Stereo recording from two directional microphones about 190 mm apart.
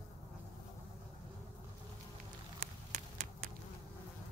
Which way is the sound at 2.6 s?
40° right (ahead or behind).